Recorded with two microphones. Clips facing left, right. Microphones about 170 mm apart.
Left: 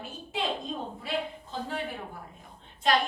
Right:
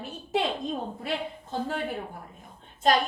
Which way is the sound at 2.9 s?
45° right (ahead or behind).